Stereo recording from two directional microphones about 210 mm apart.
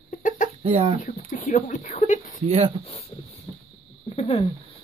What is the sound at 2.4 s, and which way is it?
Speech, 30° right (ahead or behind).